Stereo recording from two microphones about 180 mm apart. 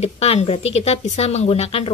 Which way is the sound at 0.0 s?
35° left (ahead or behind).